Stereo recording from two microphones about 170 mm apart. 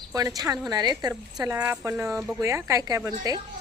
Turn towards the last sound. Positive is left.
turn(degrees=-20)  # may be behind; listen again after turning